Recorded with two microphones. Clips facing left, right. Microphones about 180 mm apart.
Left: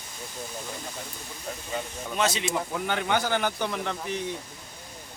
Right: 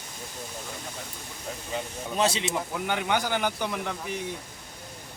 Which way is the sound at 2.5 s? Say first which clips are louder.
Left 1 dB; 10° right (ahead or behind).